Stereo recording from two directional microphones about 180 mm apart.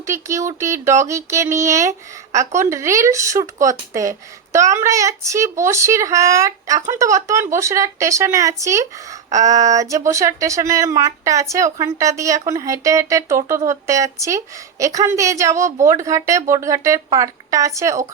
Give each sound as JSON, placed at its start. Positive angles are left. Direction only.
{"t": 0.0, "sound": "speech", "side_deg": -15}